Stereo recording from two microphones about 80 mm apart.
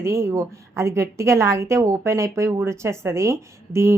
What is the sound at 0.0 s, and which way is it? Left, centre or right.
Speech, right.